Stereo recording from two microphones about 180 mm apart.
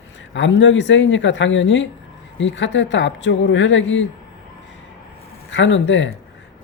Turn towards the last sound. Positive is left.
turn(degrees=90)